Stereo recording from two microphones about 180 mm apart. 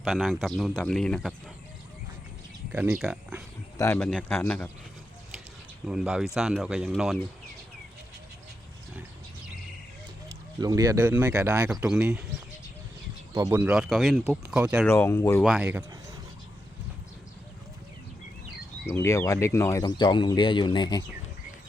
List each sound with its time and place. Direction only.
0.0 s speech: centre (ahead or behind)
2.7 s speech: 10° right (ahead or behind)
3.8 s a man's voice: 15° left (ahead or behind)
5.9 s speech: 5° right (ahead or behind)
10.6 s speech: 20° right (ahead or behind)
13.3 s speech: 15° right (ahead or behind)
14.8 s a man's voice: 15° left (ahead or behind)
15.4 s speech: 5° right (ahead or behind)
18.9 s speech: 15° left (ahead or behind)